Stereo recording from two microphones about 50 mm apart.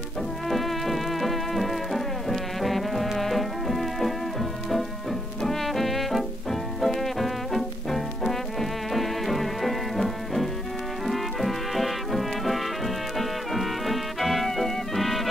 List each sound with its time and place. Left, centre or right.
0.5 s music: centre